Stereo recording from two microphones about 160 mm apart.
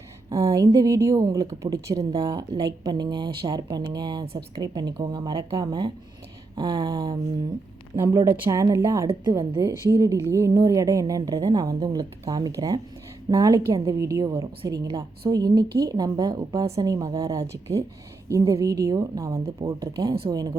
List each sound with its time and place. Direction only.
0.3 s a woman's voice: 20° right (ahead or behind)
9.0 s a woman's voice: 30° right (ahead or behind)
9.9 s a woman's voice: 20° right (ahead or behind)